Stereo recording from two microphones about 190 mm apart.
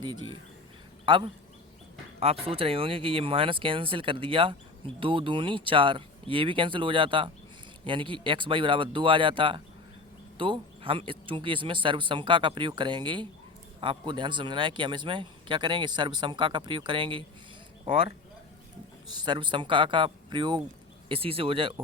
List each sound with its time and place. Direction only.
1.0 s speech: 25° right (ahead or behind)
19.1 s speech: 25° right (ahead or behind)